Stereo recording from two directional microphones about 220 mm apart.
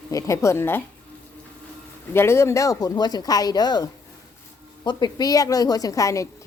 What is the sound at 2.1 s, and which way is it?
A woman's voice, 10° left (ahead or behind).